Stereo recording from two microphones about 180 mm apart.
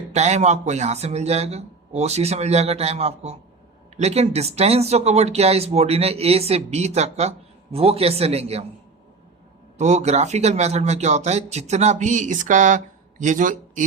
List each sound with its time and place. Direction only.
0.1 s speech: 40° right (ahead or behind)
9.7 s speech: 40° right (ahead or behind)